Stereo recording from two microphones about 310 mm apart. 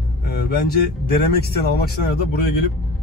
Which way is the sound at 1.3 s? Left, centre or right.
Left.